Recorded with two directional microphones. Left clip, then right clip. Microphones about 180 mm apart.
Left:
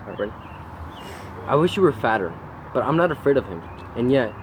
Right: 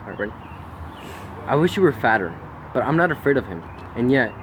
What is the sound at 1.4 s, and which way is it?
Speech, 10° right (ahead or behind).